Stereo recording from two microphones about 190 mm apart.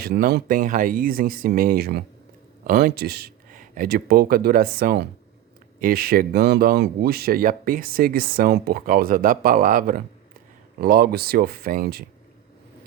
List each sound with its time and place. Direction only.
0.0 s speech: 55° right (ahead or behind)